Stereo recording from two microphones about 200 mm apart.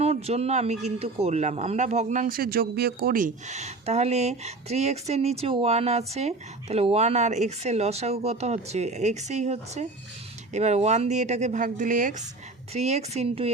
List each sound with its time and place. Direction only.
0.0 s speech: 30° right (ahead or behind)